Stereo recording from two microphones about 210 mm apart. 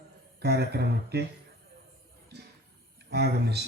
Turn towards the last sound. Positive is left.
turn(degrees=-50)  # may be behind; listen again after turning